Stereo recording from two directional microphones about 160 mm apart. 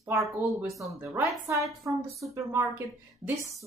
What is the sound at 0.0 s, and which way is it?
Speech, 20° right (ahead or behind).